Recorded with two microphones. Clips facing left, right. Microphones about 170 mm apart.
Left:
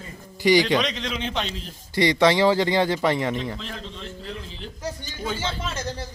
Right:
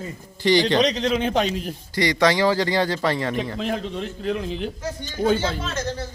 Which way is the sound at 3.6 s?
60° right (ahead or behind).